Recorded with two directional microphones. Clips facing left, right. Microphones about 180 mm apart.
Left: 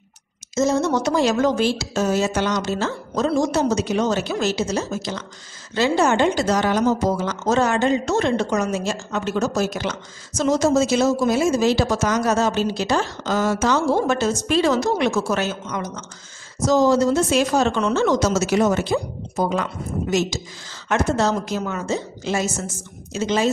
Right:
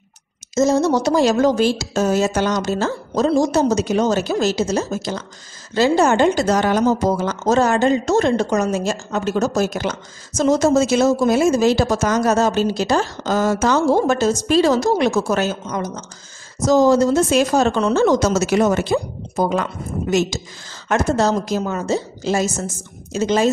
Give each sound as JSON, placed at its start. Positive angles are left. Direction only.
{"t": 0.6, "sound": "speech", "side_deg": -40}
{"t": 18.3, "sound": "a woman's voice", "side_deg": -60}
{"t": 20.9, "sound": "speech", "side_deg": -40}